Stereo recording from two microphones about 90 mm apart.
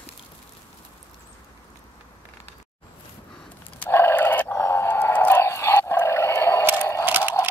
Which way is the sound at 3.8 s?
25° left (ahead or behind).